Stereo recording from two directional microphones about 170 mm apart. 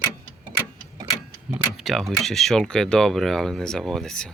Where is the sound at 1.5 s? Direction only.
5° right (ahead or behind).